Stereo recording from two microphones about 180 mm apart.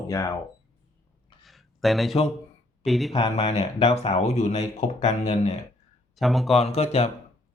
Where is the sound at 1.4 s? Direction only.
Centre (ahead or behind).